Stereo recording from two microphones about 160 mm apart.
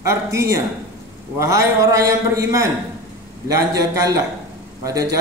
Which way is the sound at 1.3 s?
20° right (ahead or behind).